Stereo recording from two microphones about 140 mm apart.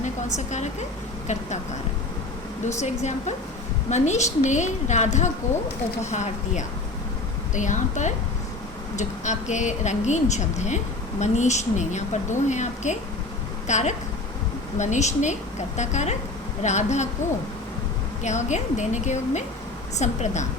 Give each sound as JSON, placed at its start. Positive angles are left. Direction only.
{"t": 0.0, "sound": "a woman's voice", "side_deg": 60}
{"t": 2.6, "sound": "a woman's voice", "side_deg": 55}
{"t": 18.2, "sound": "a woman's voice", "side_deg": 55}